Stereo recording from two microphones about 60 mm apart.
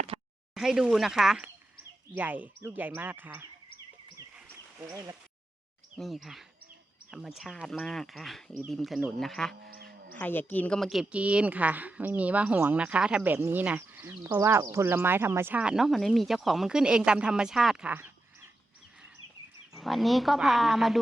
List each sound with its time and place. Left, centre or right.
0.5 s speech: centre
2.1 s speech: right
6.0 s speech: centre
10.2 s a woman's voice: left
10.8 s speech: centre
11.1 s speech: centre
13.2 s speech: right
14.3 s speech: right
14.8 s speech: right
15.7 s speech: centre
19.8 s speech: centre